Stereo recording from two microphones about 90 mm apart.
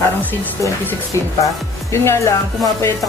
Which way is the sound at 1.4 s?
30° left (ahead or behind).